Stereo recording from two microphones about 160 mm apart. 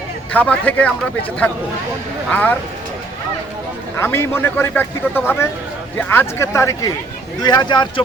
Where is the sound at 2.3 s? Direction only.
10° left (ahead or behind).